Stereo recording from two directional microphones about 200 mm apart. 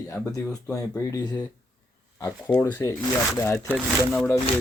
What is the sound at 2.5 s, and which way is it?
Speech, 15° left (ahead or behind).